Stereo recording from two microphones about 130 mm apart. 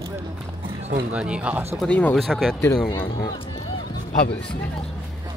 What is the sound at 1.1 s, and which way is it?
Speech, 10° right (ahead or behind).